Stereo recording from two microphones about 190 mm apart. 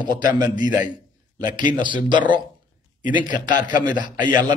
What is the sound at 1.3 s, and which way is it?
A man's voice, 20° right (ahead or behind).